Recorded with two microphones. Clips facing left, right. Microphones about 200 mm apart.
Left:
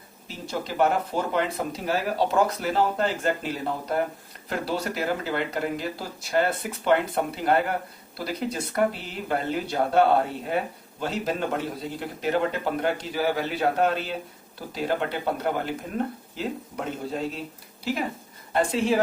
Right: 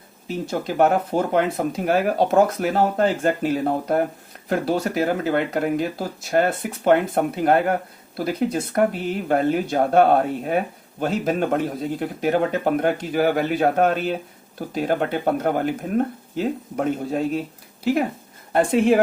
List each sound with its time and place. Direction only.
0.3 s speech: 50° right (ahead or behind)
18.5 s speech: 55° right (ahead or behind)